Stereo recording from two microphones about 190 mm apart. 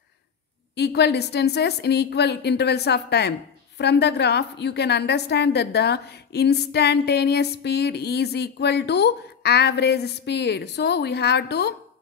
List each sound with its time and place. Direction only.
0.7 s a woman's voice: 60° left (ahead or behind)